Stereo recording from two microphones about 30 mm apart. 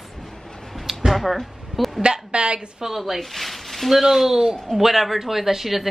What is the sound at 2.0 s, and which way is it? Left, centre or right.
Speech, right.